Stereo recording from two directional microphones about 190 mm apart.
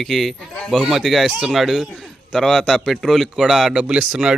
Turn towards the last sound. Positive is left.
turn(degrees=-5)  # may be behind; listen again after turning